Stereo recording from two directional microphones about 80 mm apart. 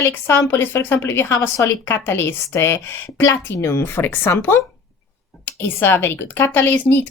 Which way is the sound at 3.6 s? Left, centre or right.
Left.